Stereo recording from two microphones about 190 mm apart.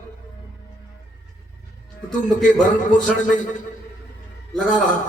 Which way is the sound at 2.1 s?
40° left (ahead or behind).